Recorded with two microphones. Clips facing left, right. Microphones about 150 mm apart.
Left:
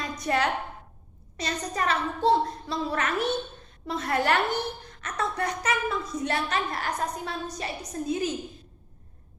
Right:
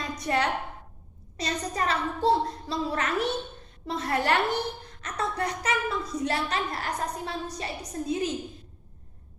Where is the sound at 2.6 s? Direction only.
30° right (ahead or behind).